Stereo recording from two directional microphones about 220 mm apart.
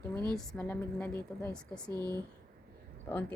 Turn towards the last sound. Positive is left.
turn(degrees=10)  # may be behind; listen again after turning